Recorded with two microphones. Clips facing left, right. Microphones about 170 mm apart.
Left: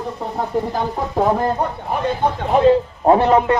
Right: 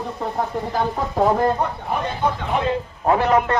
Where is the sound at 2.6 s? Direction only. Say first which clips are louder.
Left 10 dB; 30° left (ahead or behind).